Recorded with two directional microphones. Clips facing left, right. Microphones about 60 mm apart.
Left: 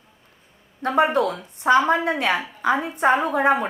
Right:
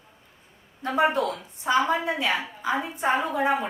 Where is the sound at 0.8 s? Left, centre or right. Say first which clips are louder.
Left 4 dB; left.